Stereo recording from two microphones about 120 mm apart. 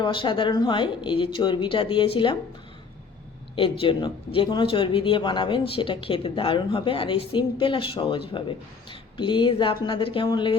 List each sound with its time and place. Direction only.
0.0 s speech: 45° left (ahead or behind)
3.5 s speech: 45° left (ahead or behind)